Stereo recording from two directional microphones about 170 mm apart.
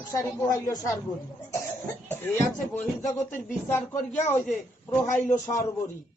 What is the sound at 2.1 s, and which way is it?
Speech, 10° left (ahead or behind).